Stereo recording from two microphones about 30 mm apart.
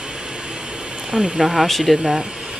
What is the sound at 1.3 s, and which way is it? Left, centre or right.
Speech, centre.